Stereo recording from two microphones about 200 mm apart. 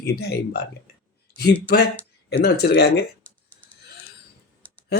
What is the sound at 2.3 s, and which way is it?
Speech, 55° left (ahead or behind).